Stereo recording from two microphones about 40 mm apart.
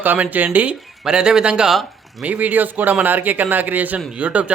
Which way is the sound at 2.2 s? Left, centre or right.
Right.